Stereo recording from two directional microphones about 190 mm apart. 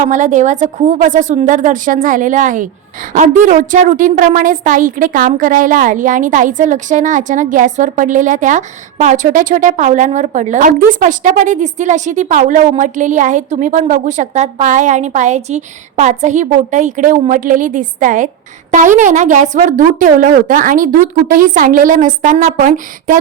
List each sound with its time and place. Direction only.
0.0 s a woman's voice: 40° right (ahead or behind)